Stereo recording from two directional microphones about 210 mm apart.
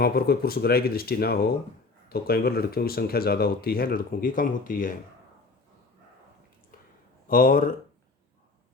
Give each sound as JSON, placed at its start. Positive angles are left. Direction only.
{"t": 0.0, "sound": "speech", "side_deg": 45}
{"t": 7.3, "sound": "speech", "side_deg": 40}